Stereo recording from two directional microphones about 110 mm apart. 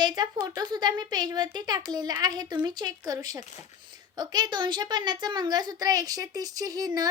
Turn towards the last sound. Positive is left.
turn(degrees=-35)  # may be behind; listen again after turning